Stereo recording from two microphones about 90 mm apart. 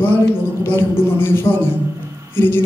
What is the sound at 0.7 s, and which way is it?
A woman's voice, 25° left (ahead or behind).